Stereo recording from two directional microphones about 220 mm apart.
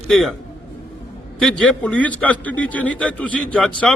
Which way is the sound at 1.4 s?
5° left (ahead or behind).